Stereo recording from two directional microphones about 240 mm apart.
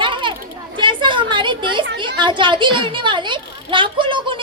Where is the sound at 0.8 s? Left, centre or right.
Centre.